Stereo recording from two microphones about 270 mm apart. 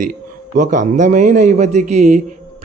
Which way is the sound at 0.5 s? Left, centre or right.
Right.